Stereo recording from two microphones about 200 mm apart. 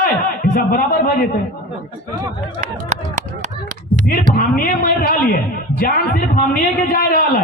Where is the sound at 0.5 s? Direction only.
45° left (ahead or behind).